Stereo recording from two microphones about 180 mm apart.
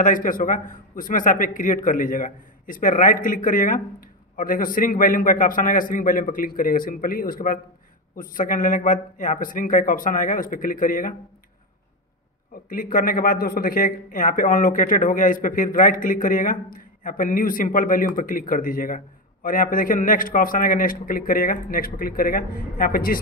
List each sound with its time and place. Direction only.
0.0 s speech: 50° left (ahead or behind)
12.6 s speech: 50° left (ahead or behind)